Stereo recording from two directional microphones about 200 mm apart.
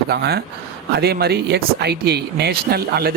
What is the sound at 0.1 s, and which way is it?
Speech, 55° right (ahead or behind).